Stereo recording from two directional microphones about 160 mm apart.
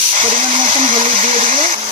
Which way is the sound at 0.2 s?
35° right (ahead or behind).